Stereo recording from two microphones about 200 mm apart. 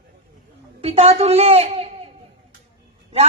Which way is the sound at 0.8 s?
30° right (ahead or behind).